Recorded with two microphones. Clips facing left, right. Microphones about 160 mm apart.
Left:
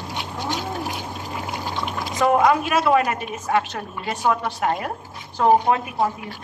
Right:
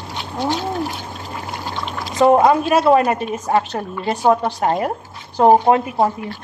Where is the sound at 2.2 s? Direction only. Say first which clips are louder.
Right 5 dB; 30° right (ahead or behind).